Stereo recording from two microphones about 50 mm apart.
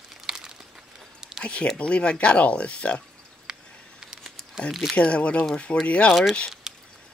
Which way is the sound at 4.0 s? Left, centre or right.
Centre.